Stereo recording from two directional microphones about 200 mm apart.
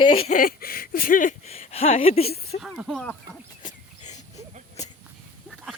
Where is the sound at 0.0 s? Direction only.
25° left (ahead or behind).